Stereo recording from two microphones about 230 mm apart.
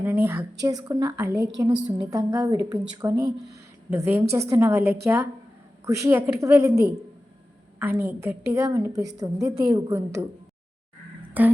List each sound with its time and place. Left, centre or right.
0.0 s a woman's voice: centre
11.4 s a woman's voice: centre